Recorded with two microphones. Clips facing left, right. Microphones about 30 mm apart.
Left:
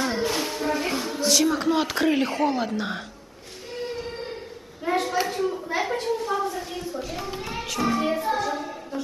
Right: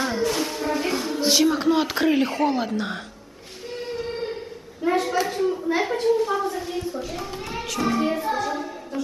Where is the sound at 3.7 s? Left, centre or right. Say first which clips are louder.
Right 2 dB; centre.